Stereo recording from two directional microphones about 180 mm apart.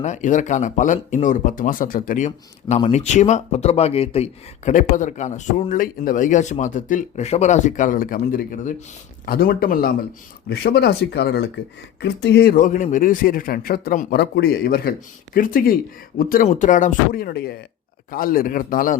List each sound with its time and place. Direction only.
0.0 s speech: 40° left (ahead or behind)
14.2 s speech: 60° left (ahead or behind)